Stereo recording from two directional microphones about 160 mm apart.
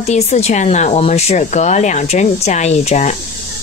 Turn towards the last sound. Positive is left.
turn(degrees=45)  # may be behind; listen again after turning